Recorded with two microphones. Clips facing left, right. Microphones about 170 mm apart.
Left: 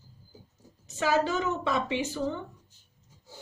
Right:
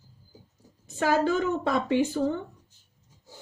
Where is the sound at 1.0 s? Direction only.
55° right (ahead or behind).